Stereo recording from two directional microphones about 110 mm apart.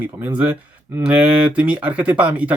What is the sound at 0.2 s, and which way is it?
Speech, 15° right (ahead or behind).